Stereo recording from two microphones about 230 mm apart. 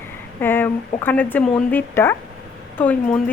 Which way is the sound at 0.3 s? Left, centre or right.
Centre.